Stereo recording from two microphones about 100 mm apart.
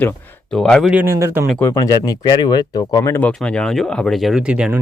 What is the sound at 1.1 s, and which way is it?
Speech, 30° right (ahead or behind).